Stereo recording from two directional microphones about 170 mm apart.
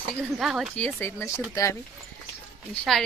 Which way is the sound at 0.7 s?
10° left (ahead or behind).